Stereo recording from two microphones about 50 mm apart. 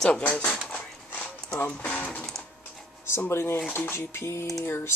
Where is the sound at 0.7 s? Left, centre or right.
Left.